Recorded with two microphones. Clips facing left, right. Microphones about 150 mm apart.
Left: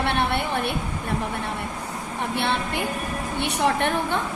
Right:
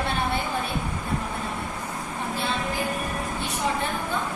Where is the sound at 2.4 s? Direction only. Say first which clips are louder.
Left 3 dB; 70° left (ahead or behind).